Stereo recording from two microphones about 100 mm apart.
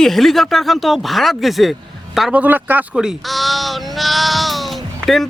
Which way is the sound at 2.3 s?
15° right (ahead or behind).